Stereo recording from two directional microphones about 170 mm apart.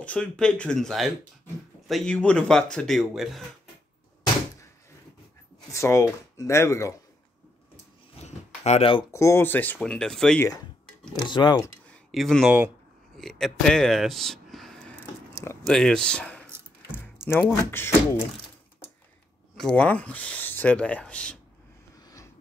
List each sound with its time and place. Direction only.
0.0 s speech: 5° left (ahead or behind)
5.7 s speech: 15° left (ahead or behind)
8.6 s speech: 35° left (ahead or behind)
9.1 s speech: 15° left (ahead or behind)
10.4 s speech: 20° left (ahead or behind)
11.9 s speech: 5° left (ahead or behind)
16.4 s a sound: 15° right (ahead or behind)
17.4 s speech: 10° left (ahead or behind)
19.5 s speech: 5° left (ahead or behind)